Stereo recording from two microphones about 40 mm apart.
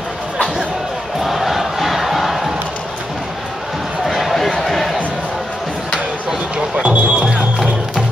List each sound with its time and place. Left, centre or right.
1.2 s battle cry: centre
4.0 s run: centre
6.8 s music: right